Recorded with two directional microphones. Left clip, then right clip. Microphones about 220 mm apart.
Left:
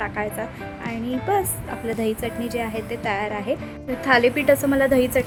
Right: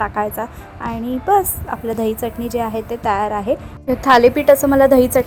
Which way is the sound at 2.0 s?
15° right (ahead or behind).